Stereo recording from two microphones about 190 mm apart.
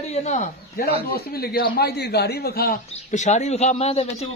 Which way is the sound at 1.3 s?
55° left (ahead or behind).